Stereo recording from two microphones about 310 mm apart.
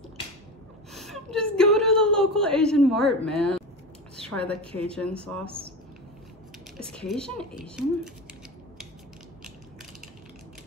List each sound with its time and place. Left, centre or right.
0.9 s a sound: centre
1.6 s a man's voice: centre
6.8 s a man's voice: centre